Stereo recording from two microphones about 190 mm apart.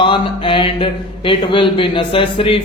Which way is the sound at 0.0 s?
25° left (ahead or behind).